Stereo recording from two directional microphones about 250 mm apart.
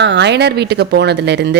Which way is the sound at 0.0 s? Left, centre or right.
Right.